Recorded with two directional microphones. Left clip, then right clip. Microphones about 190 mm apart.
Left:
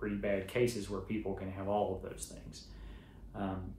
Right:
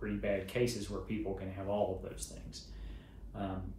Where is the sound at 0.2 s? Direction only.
15° left (ahead or behind).